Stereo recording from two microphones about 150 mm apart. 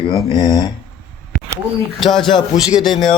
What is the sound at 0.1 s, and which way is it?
Speech, 30° left (ahead or behind).